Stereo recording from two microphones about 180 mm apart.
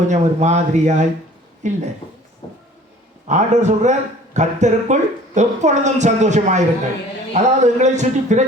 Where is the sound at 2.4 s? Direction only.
25° left (ahead or behind).